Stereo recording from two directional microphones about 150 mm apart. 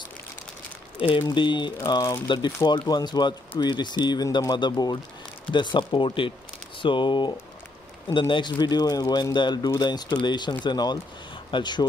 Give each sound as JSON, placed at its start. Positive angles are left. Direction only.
{"t": 0.9, "sound": "speech", "side_deg": 35}